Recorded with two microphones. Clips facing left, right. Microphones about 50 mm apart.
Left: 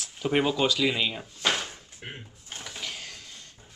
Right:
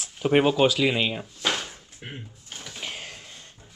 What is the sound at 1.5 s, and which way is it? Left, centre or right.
Drawer open or close, centre.